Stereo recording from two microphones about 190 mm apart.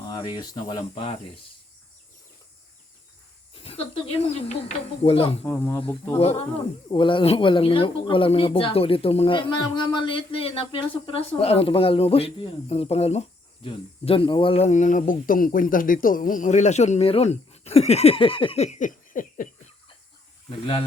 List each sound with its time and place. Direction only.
0.1 s speech: 25° left (ahead or behind)
3.5 s speech: 30° left (ahead or behind)
5.5 s speech: 10° left (ahead or behind)
6.1 s speech: 30° left (ahead or behind)